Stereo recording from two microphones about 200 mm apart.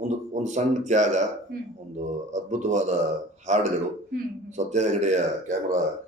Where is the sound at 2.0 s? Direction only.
35° right (ahead or behind).